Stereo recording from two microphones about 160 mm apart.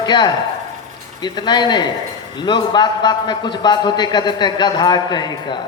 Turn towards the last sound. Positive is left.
turn(degrees=30)  # may be behind; listen again after turning